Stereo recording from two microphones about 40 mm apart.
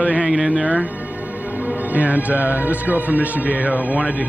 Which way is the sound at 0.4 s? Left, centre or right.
Right.